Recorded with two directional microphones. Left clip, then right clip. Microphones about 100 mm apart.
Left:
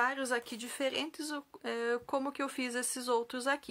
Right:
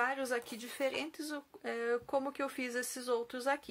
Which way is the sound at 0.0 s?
40° left (ahead or behind).